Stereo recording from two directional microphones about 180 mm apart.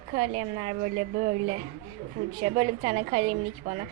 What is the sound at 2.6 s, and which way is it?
Speech, 35° right (ahead or behind).